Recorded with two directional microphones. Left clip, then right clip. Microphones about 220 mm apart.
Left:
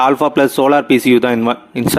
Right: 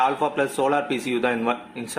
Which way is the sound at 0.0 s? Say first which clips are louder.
Left 10 dB; 45° left (ahead or behind).